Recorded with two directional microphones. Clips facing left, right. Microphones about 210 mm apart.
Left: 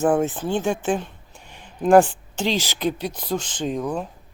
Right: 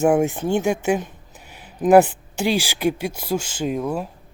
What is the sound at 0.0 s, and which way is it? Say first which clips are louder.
Speech: right 2 dB; 10° right (ahead or behind).